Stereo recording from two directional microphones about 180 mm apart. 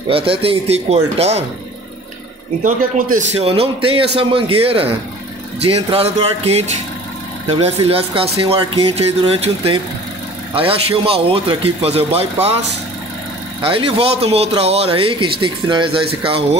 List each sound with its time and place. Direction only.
0.1 s speech: 30° right (ahead or behind)
2.6 s speech: 45° right (ahead or behind)
13.6 s speech: 30° right (ahead or behind)